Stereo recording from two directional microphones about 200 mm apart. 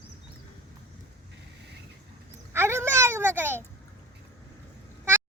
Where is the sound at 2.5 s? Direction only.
15° right (ahead or behind).